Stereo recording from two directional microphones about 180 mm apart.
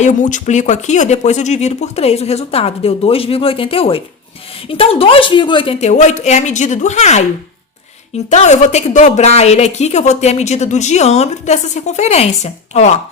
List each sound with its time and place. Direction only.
0.0 s a woman's voice: 45° left (ahead or behind)
8.3 s a woman's voice: 40° left (ahead or behind)